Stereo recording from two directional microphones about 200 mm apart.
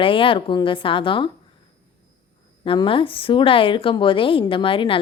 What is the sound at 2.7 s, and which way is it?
Speech, 25° left (ahead or behind).